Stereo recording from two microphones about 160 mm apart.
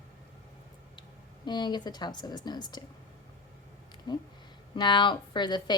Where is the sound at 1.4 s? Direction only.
25° left (ahead or behind).